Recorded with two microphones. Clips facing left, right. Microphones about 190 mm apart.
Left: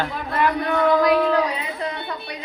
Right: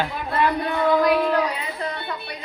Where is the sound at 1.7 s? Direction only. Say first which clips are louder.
Left 1 dB; centre (ahead or behind).